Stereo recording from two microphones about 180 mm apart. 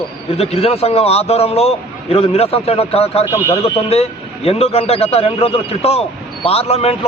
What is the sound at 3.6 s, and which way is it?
A man's voice, 35° left (ahead or behind).